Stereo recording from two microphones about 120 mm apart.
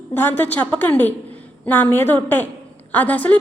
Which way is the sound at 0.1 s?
15° left (ahead or behind).